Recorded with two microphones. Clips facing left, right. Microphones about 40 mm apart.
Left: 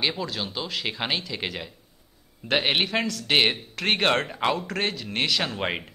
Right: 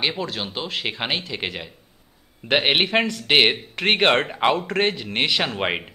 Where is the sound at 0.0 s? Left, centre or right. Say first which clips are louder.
Right 2 dB; right.